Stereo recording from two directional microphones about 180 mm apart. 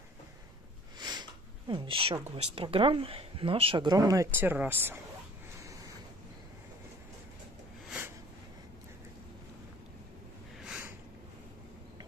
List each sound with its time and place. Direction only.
0.9 s sniff: 25° right (ahead or behind)
1.7 s speech: 25° right (ahead or behind); by 5.0 s 10° right (ahead or behind)
10.6 s a sound: 5° right (ahead or behind)